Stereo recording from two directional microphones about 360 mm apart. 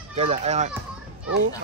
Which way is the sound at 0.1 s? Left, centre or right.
Centre.